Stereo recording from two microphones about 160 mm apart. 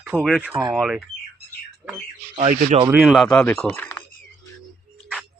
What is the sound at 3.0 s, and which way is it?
Speech, centre (ahead or behind).